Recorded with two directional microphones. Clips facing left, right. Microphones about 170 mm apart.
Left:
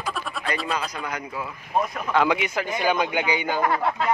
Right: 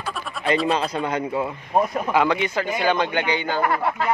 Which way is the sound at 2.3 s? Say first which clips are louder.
Right 2 dB; 5° left (ahead or behind).